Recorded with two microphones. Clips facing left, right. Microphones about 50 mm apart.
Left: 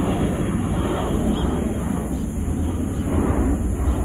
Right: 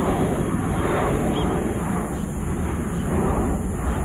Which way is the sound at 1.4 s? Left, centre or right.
Right.